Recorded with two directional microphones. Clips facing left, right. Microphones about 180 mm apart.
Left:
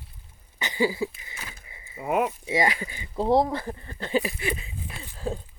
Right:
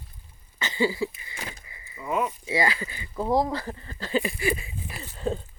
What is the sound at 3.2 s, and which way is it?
Speech, 30° left (ahead or behind).